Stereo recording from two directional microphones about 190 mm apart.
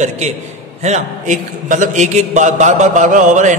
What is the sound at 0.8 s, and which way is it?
A man's voice, 40° right (ahead or behind).